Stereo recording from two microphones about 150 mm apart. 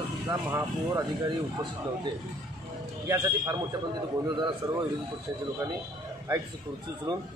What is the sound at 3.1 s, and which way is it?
Speech, 20° right (ahead or behind).